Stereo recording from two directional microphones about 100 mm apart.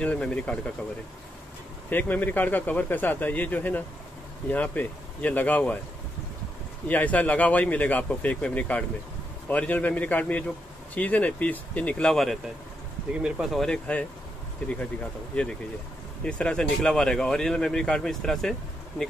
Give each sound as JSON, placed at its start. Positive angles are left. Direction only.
{"t": 0.0, "sound": "speech", "side_deg": 10}
{"t": 1.9, "sound": "speech", "side_deg": 15}
{"t": 6.9, "sound": "speech", "side_deg": 15}
{"t": 13.7, "sound": "speech", "side_deg": 15}
{"t": 16.3, "sound": "speech", "side_deg": 10}